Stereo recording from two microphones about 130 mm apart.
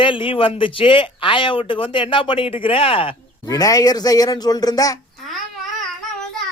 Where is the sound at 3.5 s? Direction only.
30° left (ahead or behind).